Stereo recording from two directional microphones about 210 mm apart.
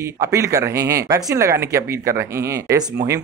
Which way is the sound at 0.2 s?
15° right (ahead or behind).